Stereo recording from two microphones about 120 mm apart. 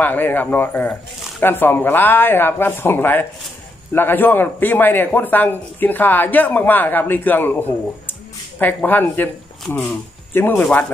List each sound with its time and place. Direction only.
0.0 s a man's voice: 15° left (ahead or behind)